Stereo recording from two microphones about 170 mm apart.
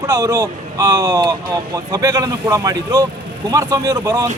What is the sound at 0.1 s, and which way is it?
Speech, 15° right (ahead or behind).